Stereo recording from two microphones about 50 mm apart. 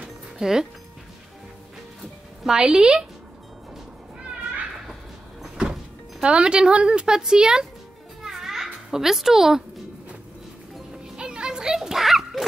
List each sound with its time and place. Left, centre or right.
0.4 s speech: centre
2.5 s speech: centre
6.2 s speech: centre
8.2 s music: centre
8.9 s speech: centre
11.1 s a sound: centre